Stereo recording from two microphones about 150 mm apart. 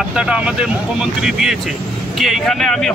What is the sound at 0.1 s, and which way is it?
Speech, 5° right (ahead or behind).